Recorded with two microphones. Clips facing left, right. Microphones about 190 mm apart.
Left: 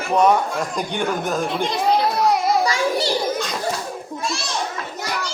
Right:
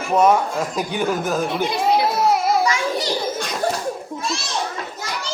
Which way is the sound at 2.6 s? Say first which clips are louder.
Left 1 dB; 35° left (ahead or behind).